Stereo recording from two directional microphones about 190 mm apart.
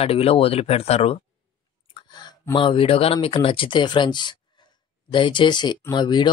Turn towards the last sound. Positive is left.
turn(degrees=25)  # may be behind; listen again after turning